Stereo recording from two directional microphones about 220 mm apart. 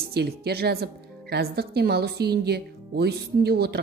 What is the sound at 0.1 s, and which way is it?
A woman's voice, 45° right (ahead or behind).